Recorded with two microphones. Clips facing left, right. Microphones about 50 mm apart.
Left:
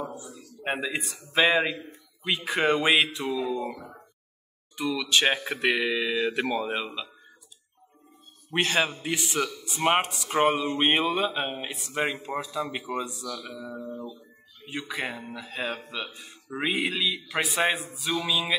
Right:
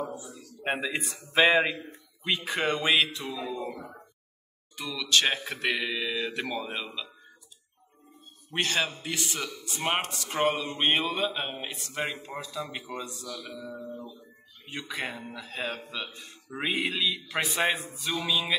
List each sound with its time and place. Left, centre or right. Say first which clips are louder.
0.1 s speech: even; centre
2.2 s speech: left 3 dB; centre
2.7 s speech: left 2 dB; centre
4.7 s speech: left 2 dB; centre
8.5 s speech: left 3 dB; centre